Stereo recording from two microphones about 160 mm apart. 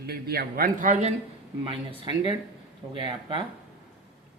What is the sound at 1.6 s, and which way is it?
Speech, 30° right (ahead or behind).